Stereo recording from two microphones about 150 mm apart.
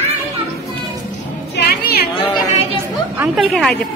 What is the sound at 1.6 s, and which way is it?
Music, 90° left.